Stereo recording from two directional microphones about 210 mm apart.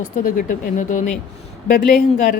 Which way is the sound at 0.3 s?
40° left (ahead or behind).